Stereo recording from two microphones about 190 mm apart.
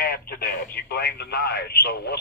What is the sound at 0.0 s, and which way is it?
Speech, 50° left (ahead or behind).